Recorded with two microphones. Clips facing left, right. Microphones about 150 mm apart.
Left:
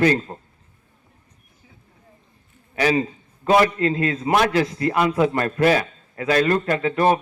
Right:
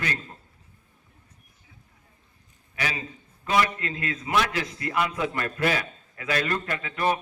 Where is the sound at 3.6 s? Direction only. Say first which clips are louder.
Left 9 dB; 35° left (ahead or behind).